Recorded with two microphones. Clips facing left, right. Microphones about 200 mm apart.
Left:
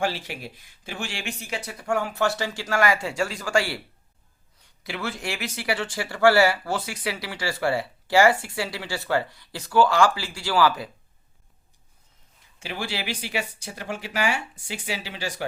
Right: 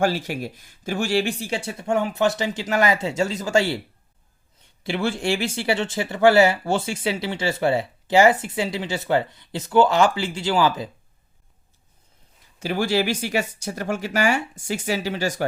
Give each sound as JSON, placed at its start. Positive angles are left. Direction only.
{"t": 0.0, "sound": "speech", "side_deg": -45}
{"t": 12.5, "sound": "speech", "side_deg": -40}